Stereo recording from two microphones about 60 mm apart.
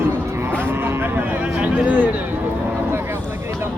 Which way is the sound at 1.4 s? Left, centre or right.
Right.